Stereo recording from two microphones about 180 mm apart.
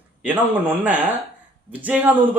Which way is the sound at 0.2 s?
10° right (ahead or behind).